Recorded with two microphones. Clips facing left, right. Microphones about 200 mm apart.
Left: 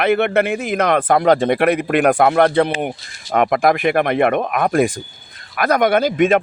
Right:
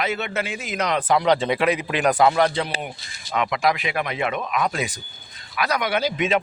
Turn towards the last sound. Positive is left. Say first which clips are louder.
# left 7 dB
turn(degrees=50)  # may be behind; listen again after turning